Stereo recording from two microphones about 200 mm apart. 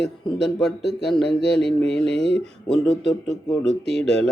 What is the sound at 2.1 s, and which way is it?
Speech, 60° left (ahead or behind).